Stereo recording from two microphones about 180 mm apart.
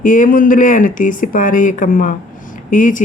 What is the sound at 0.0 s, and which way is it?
Speech, 50° left (ahead or behind).